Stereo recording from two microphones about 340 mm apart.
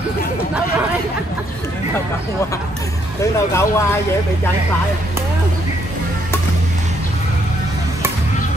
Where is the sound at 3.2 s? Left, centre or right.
Centre.